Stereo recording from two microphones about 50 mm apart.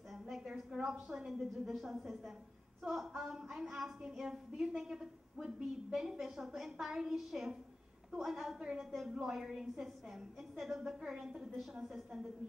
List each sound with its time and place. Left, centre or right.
0.1 s a sound: centre
0.7 s a woman's voice: centre
8.5 s a woman's voice: centre